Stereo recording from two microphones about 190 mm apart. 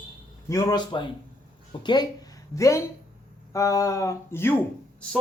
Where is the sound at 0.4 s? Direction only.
15° left (ahead or behind).